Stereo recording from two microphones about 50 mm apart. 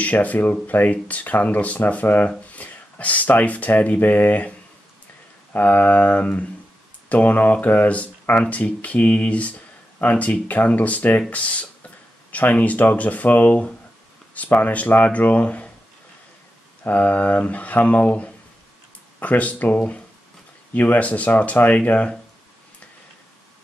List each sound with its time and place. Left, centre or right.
0.0 s speech: left
16.8 s speech: left